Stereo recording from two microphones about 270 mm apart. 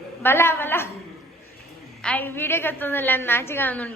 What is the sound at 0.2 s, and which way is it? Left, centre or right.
Speech, centre.